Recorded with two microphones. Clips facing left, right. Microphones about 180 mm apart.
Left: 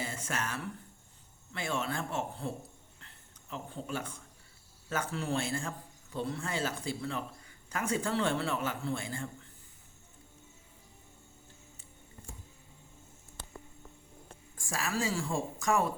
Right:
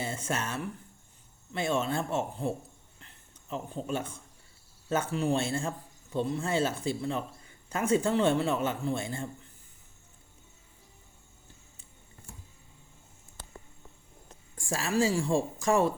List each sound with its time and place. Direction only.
0.0 s a man's voice: 25° right (ahead or behind)
3.0 s a sound: 20° right (ahead or behind)
4.9 s a man's voice: 20° right (ahead or behind)
14.5 s a woman's voice: 30° right (ahead or behind)